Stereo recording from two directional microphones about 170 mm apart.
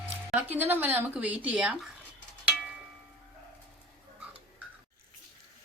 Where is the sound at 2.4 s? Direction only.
10° right (ahead or behind).